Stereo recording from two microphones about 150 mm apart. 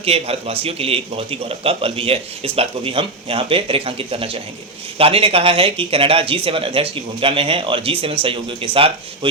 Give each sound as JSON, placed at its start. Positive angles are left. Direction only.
{"t": 0.0, "sound": "speech", "side_deg": -40}